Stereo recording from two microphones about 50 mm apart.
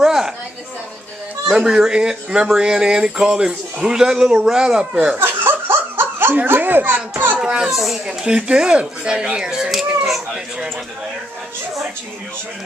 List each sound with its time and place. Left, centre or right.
0.0 s a sound: centre
1.5 s speech: centre
5.1 s laughter: right
6.4 s a child's voice: right
7.3 s a child's voice: centre